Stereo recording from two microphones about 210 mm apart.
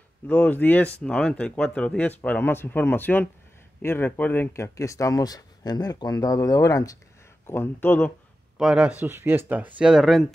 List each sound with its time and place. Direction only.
0.3 s speech: 5° left (ahead or behind)
8.5 s speech: 5° right (ahead or behind)